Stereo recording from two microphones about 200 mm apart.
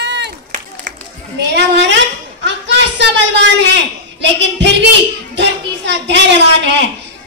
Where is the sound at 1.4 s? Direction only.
60° right (ahead or behind).